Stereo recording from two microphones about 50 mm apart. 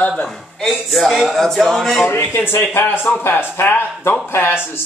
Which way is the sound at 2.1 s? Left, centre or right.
Left.